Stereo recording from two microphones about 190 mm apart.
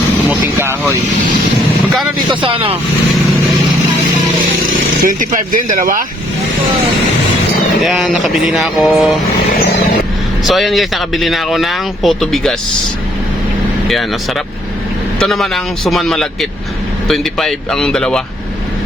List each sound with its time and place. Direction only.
0.3 s speech: 10° right (ahead or behind)
2.3 s speech: 25° right (ahead or behind)
5.0 s speech: 45° right (ahead or behind)
7.9 s speech: centre (ahead or behind)
10.4 s speech: centre (ahead or behind)
15.2 s speech: centre (ahead or behind)